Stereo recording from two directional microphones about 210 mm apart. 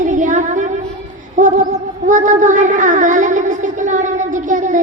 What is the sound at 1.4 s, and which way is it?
Music, 35° right (ahead or behind).